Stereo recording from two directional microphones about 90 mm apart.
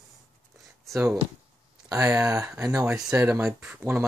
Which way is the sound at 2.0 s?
40° right (ahead or behind).